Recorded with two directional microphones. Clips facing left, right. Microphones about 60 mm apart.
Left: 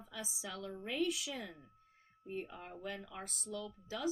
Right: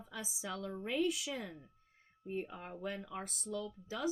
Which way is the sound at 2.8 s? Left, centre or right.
Right.